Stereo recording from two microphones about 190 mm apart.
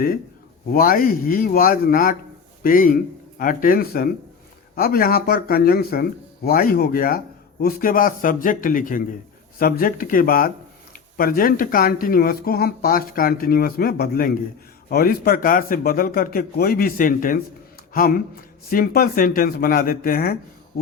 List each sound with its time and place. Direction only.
0.7 s speech: 50° left (ahead or behind)